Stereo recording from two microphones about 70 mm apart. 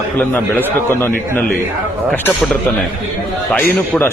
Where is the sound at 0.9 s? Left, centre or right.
Left.